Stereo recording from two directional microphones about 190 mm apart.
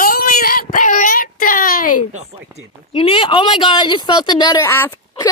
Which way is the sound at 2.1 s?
35° right (ahead or behind).